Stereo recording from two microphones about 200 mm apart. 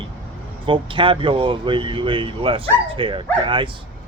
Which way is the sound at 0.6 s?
25° right (ahead or behind).